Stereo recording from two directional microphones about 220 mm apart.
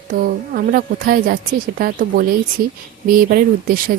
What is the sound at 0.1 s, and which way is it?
Speech, 40° right (ahead or behind).